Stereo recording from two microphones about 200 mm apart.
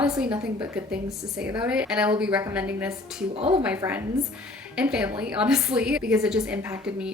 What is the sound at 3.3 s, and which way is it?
Speech, 30° right (ahead or behind).